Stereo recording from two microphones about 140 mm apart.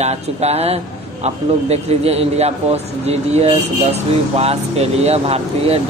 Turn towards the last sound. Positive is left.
turn(degrees=-45)  # may be behind; listen again after turning